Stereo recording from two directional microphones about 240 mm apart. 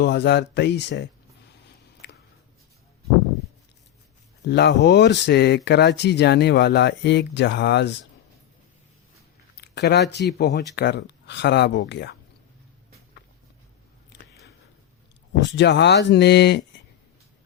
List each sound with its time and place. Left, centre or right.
0.0 s speech: left
2.0 s a sound: left
4.4 s speech: left
9.6 s a sound: left
10.1 s speech: left
15.3 s speech: left